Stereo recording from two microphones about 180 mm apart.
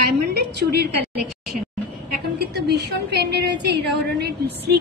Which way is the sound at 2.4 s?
65° right (ahead or behind).